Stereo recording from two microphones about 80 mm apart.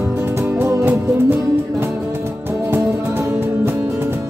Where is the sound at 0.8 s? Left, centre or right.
Right.